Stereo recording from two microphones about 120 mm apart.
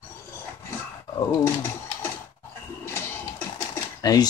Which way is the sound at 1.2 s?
20° left (ahead or behind).